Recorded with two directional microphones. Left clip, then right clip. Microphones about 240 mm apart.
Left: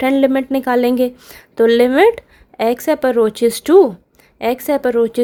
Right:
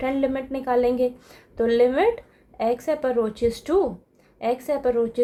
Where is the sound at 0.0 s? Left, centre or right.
Left.